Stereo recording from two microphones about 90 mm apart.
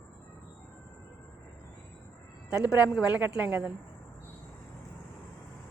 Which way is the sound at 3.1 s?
15° right (ahead or behind).